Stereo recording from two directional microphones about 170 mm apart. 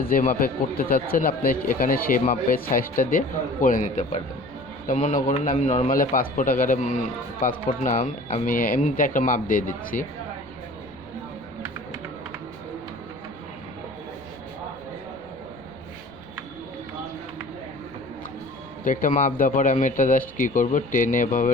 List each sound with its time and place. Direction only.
0.0 s a man's voice: 60° left (ahead or behind)
18.9 s a man's voice: 50° left (ahead or behind)